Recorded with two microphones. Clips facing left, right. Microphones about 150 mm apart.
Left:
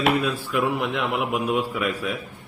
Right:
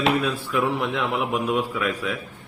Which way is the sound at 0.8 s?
Centre (ahead or behind).